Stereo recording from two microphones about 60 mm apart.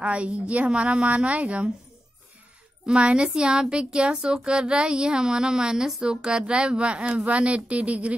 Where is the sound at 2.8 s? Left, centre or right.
Centre.